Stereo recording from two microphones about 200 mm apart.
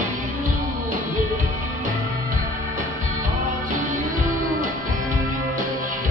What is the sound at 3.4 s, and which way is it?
Music, 40° right (ahead or behind).